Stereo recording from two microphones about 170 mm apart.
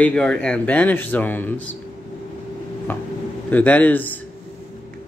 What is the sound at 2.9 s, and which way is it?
Speech, 10° left (ahead or behind).